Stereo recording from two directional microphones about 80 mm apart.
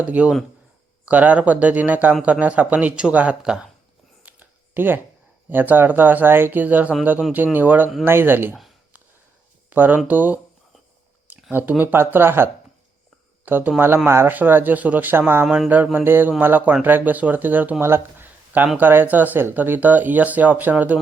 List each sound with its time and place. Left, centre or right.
0.0 s speech: centre
4.2 s a sound: right
5.5 s speech: right
9.6 s speech: right
11.3 s a sound: right
11.8 s speech: right